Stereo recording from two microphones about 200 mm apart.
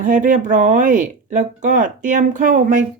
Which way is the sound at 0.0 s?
40° right (ahead or behind).